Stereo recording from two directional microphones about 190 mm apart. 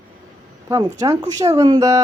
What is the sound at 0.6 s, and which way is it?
Speech, 15° right (ahead or behind).